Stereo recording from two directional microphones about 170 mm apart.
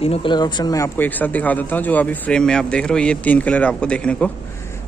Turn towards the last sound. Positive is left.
turn(degrees=5)  # may be behind; listen again after turning